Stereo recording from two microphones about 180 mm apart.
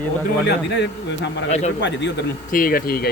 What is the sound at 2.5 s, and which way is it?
Speech, 55° left (ahead or behind).